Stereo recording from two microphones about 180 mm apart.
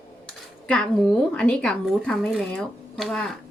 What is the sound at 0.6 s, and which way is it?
Speech, 5° left (ahead or behind).